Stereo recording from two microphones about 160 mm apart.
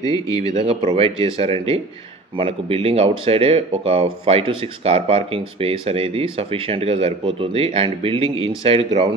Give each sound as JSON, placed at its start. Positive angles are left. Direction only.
{"t": 0.0, "sound": "speech", "side_deg": 25}
{"t": 0.7, "sound": "speech", "side_deg": -35}